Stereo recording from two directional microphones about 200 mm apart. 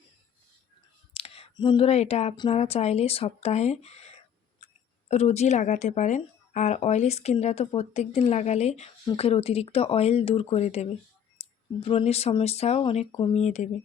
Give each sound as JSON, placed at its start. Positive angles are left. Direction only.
{"t": 1.1, "sound": "speech", "side_deg": 30}